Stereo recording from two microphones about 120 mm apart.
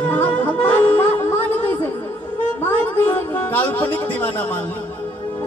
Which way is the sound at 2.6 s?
15° left (ahead or behind).